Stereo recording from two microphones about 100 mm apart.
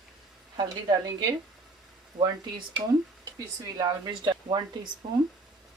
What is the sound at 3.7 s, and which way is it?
Speech, 45° right (ahead or behind).